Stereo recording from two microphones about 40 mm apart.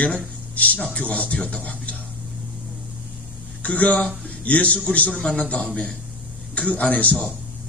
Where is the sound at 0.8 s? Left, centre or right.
Left.